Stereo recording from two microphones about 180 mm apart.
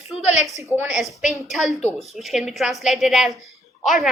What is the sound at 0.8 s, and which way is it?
A woman's voice, 5° right (ahead or behind).